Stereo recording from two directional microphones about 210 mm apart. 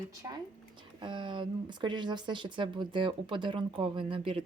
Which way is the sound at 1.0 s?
25° right (ahead or behind).